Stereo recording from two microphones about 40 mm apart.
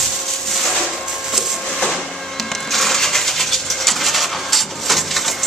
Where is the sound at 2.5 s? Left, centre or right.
Centre.